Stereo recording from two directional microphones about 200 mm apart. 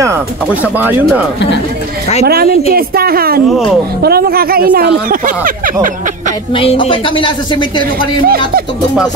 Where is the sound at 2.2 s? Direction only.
50° right (ahead or behind).